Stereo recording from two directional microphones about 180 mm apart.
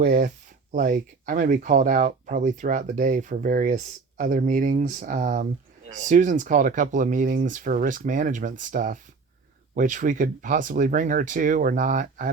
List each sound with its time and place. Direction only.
0.0 s speech: 45° right (ahead or behind)